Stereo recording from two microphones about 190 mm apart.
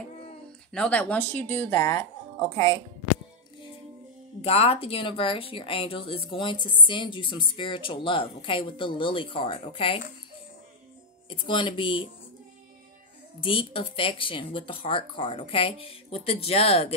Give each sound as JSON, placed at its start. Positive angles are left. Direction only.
{"t": 0.7, "sound": "speech", "side_deg": 5}
{"t": 4.4, "sound": "speech", "side_deg": 30}
{"t": 11.2, "sound": "speech", "side_deg": 25}
{"t": 13.4, "sound": "speech", "side_deg": 30}